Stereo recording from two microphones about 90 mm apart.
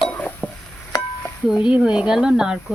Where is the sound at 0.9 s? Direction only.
50° left (ahead or behind).